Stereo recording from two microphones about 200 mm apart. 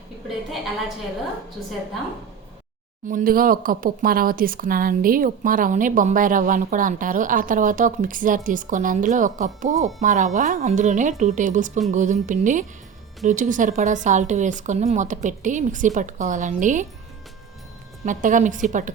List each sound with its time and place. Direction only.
3.1 s speech: 45° right (ahead or behind)
18.0 s speech: 40° right (ahead or behind)